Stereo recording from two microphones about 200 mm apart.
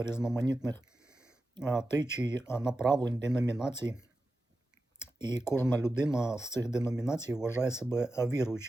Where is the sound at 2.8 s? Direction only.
20° right (ahead or behind).